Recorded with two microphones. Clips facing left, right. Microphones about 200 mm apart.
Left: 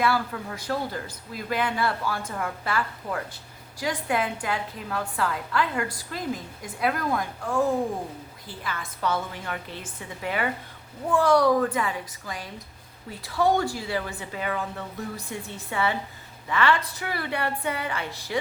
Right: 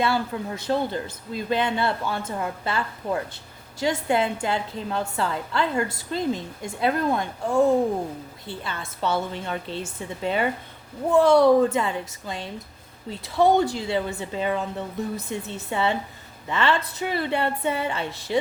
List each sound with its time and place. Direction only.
0.0 s a woman's voice: 25° right (ahead or behind)